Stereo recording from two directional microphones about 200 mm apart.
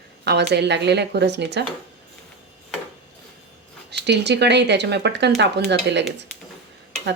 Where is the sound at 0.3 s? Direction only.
55° right (ahead or behind).